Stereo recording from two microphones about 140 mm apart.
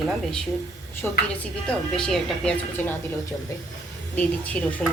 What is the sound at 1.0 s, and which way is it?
A woman's voice, 15° left (ahead or behind).